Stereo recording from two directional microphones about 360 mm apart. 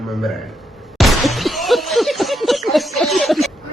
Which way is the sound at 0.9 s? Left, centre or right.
Centre.